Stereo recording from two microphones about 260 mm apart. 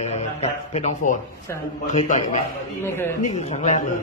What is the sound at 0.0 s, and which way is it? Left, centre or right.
A man's voice, left.